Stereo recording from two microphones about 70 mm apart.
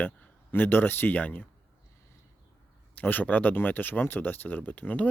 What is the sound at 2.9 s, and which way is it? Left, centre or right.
Speech, left.